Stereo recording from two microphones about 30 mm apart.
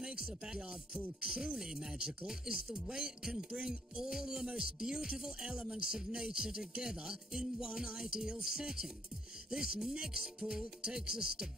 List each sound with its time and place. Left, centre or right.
0.0 s speech: right
4.0 s speech: centre